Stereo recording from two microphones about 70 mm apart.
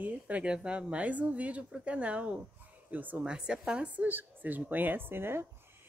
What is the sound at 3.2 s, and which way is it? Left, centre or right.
Speech, centre.